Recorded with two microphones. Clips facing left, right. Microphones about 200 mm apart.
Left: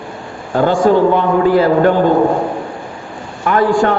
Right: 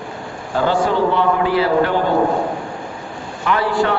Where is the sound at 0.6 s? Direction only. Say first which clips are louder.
Left 6 dB; 45° left (ahead or behind).